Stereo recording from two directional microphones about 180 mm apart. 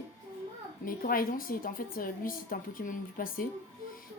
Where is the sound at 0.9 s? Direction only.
50° left (ahead or behind).